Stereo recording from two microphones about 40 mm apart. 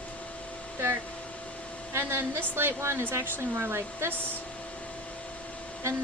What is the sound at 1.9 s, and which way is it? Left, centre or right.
Speech, right.